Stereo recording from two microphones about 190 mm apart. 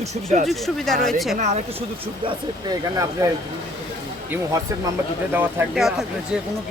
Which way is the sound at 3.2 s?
20° right (ahead or behind).